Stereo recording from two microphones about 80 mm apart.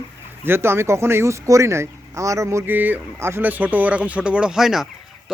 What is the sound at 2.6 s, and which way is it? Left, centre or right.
Speech, right.